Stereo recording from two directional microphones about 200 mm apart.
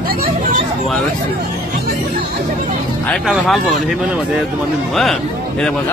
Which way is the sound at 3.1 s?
Centre (ahead or behind).